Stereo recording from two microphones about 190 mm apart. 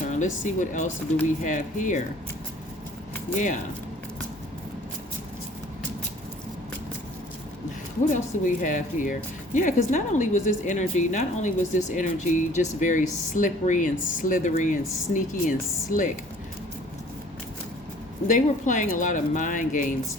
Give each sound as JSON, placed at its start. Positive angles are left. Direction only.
{"t": 0.1, "sound": "speech", "side_deg": 40}
{"t": 3.3, "sound": "speech", "side_deg": 40}
{"t": 8.1, "sound": "speech", "side_deg": 40}
{"t": 18.3, "sound": "speech", "side_deg": 45}